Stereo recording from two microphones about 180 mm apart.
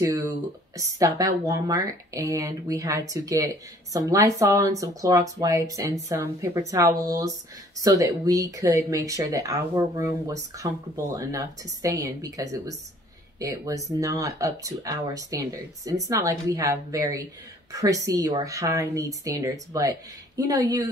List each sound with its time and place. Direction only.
0.7 s speech: 20° right (ahead or behind)